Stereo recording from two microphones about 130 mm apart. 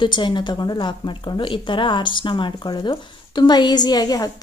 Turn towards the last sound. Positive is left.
turn(degrees=30)  # may be behind; listen again after turning